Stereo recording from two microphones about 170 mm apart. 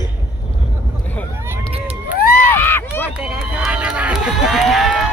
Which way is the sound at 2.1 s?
65° left (ahead or behind).